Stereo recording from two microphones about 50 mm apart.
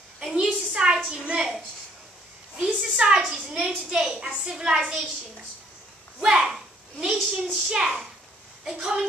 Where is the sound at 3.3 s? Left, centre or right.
Centre.